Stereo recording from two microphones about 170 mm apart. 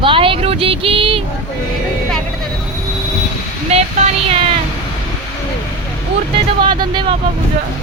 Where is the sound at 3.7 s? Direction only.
35° right (ahead or behind).